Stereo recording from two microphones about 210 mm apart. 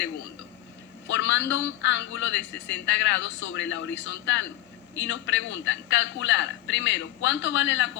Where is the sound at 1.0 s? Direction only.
55° left (ahead or behind).